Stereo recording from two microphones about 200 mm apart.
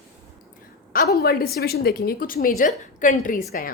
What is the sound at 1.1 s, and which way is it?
A woman's voice, 50° left (ahead or behind).